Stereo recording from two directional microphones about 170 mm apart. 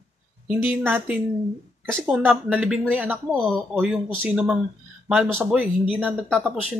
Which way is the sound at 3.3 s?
5° left (ahead or behind).